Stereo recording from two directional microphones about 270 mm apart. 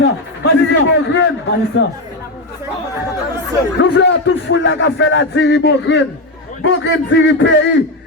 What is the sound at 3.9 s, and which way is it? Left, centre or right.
A man's voice, left.